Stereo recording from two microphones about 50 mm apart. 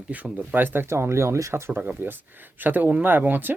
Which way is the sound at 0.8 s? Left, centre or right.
Right.